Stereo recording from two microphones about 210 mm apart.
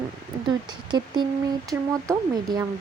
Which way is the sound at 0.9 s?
20° right (ahead or behind).